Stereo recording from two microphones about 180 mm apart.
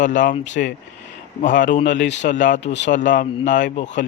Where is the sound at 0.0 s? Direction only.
45° left (ahead or behind).